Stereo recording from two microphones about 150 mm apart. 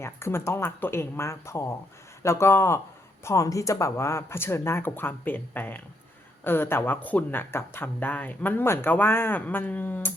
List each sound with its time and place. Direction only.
0.0 s speech: 15° left (ahead or behind)